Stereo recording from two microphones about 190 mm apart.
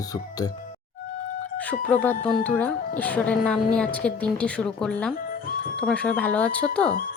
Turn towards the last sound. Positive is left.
turn(degrees=10)  # may be behind; listen again after turning